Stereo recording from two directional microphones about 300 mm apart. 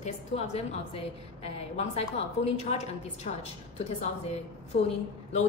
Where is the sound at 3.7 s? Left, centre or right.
Left.